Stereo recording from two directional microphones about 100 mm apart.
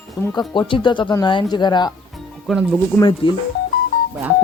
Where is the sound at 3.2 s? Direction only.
60° left (ahead or behind).